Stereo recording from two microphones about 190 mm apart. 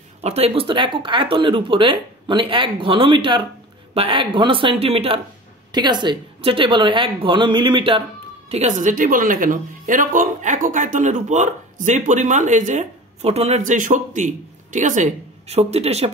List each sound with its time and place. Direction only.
0.2 s speech: 30° right (ahead or behind)
8.5 s speech: 35° right (ahead or behind)